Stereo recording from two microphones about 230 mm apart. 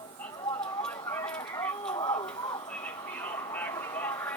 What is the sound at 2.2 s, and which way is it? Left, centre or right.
Vehicle, centre.